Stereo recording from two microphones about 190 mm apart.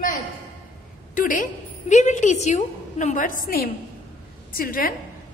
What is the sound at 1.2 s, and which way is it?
A woman's voice, 45° left (ahead or behind).